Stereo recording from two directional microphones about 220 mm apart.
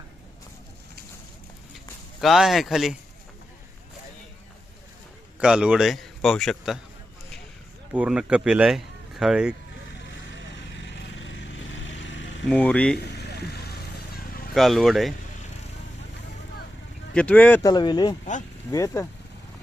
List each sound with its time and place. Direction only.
2.2 s speech: centre (ahead or behind)
5.4 s a man's voice: 5° right (ahead or behind)
7.9 s speech: 5° right (ahead or behind)
10.5 s vehicle: 55° left (ahead or behind)
12.5 s speech: 5° left (ahead or behind)
13.0 s vehicle: 50° left (ahead or behind)
14.5 s speech: centre (ahead or behind)
17.2 s speech: 5° left (ahead or behind)